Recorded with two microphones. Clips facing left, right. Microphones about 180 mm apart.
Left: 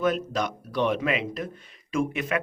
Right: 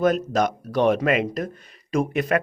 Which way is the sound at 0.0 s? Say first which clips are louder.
Right 5 dB; 40° right (ahead or behind).